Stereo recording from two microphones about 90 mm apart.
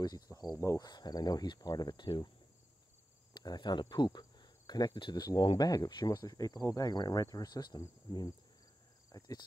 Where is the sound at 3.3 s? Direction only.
50° left (ahead or behind).